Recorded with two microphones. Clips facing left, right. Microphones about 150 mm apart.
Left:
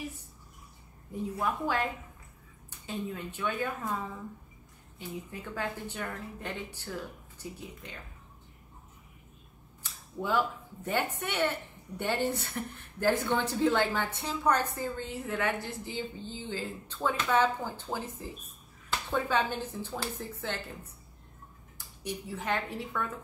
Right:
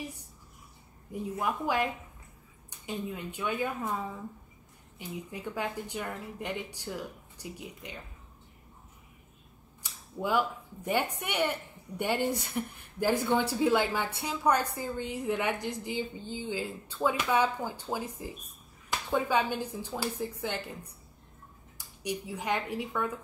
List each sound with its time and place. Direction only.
1.3 s a woman's voice: 15° right (ahead or behind)
2.9 s a woman's voice: 15° right (ahead or behind)
4.9 s a woman's voice: 15° right (ahead or behind)
10.2 s a woman's voice: 10° right (ahead or behind)